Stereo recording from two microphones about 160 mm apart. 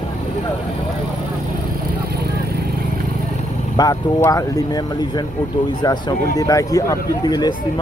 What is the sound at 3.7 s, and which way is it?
Speech, 20° left (ahead or behind).